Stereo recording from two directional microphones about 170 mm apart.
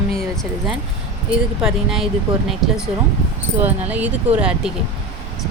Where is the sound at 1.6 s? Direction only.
Centre (ahead or behind).